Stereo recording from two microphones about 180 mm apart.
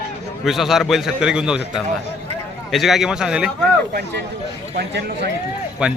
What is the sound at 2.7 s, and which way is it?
Speech, centre (ahead or behind).